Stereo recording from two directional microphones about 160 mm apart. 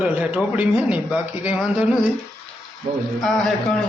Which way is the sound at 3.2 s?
5° left (ahead or behind).